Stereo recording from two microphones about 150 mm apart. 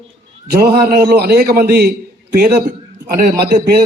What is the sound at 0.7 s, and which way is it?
A man's voice, 85° right.